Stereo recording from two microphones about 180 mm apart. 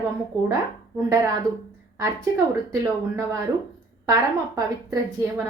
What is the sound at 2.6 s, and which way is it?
Speech, 15° right (ahead or behind).